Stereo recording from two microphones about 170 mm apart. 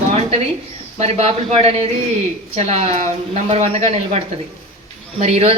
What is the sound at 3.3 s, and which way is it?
Speech, 40° right (ahead or behind).